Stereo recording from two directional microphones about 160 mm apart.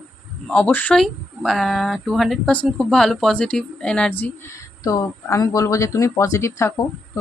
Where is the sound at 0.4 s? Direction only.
10° left (ahead or behind).